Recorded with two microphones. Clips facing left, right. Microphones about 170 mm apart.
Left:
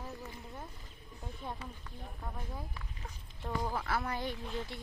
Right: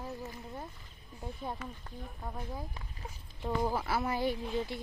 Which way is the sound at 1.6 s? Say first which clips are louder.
Right 3 dB; 30° left (ahead or behind).